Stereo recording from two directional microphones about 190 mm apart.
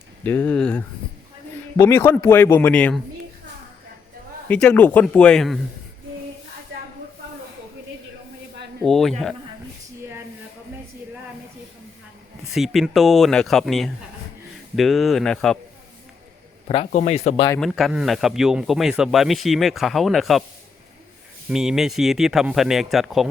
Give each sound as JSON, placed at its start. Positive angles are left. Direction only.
{"t": 0.3, "sound": "a man's voice", "side_deg": 10}
{"t": 4.4, "sound": "speech", "side_deg": 5}
{"t": 8.8, "sound": "speech", "side_deg": 0}
{"t": 12.5, "sound": "speech", "side_deg": 0}
{"t": 16.6, "sound": "speech", "side_deg": 35}
{"t": 17.6, "sound": "speech", "side_deg": 0}
{"t": 21.5, "sound": "speech", "side_deg": -5}